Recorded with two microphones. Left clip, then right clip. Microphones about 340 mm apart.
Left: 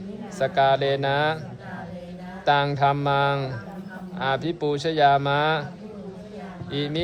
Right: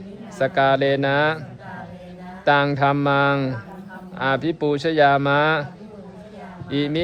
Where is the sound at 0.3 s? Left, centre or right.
Right.